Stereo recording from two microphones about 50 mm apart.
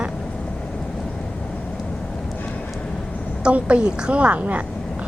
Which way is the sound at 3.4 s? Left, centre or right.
Right.